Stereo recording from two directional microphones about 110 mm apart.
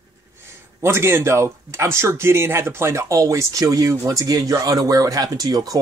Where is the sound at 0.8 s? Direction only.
25° right (ahead or behind).